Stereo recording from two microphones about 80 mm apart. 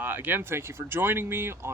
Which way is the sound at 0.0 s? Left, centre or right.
Right.